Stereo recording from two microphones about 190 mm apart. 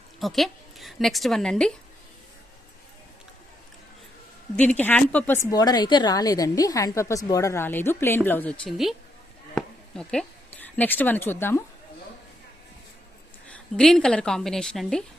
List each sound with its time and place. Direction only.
0.2 s a woman's voice: centre (ahead or behind)
4.5 s a woman's voice: 5° left (ahead or behind)
13.5 s speech: 5° left (ahead or behind)